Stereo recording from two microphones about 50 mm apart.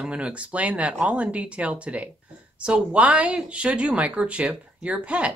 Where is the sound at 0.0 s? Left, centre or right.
Right.